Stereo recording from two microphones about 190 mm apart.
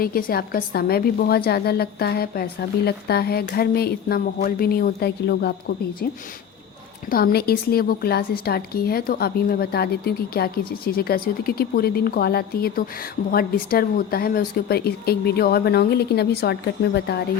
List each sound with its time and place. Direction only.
0.0 s a woman's voice: 50° left (ahead or behind)
7.1 s a woman's voice: 55° left (ahead or behind)